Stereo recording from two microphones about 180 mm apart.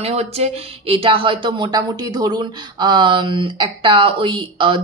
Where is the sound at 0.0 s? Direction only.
35° right (ahead or behind).